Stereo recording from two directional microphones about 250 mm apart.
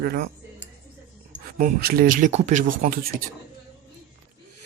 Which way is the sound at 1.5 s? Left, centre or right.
Right.